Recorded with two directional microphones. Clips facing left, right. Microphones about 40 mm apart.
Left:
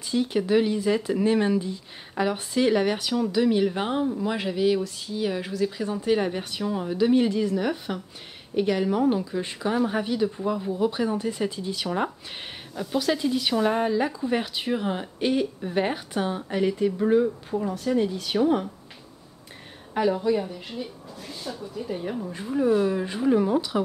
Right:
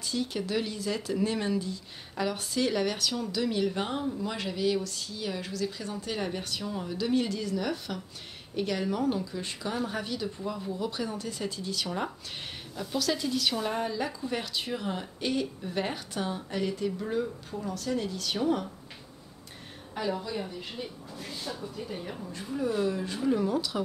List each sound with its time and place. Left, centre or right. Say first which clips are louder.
0.0 s speech: left 7 dB; left
20.0 s a woman's voice: left 9 dB; left
20.7 s speech: left 4 dB; centre
22.5 s speech: left 7 dB; left